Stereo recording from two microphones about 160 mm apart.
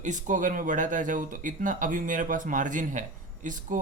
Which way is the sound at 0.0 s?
50° right (ahead or behind).